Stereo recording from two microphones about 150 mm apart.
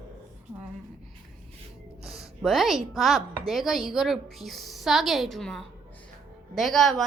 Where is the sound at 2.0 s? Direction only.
Centre (ahead or behind).